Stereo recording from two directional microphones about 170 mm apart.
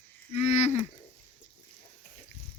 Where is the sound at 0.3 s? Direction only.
40° left (ahead or behind).